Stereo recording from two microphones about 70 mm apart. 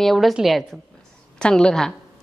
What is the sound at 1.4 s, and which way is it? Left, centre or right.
Speech, centre.